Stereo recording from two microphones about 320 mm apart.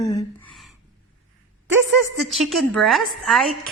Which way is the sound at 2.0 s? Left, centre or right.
Centre.